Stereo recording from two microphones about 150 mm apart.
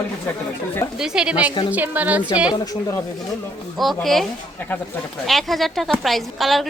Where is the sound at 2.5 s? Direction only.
25° left (ahead or behind).